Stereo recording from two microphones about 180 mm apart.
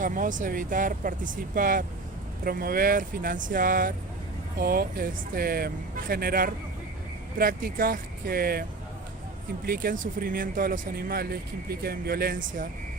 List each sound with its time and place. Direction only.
0.0 s speech: 45° right (ahead or behind)
9.6 s speech: 55° right (ahead or behind)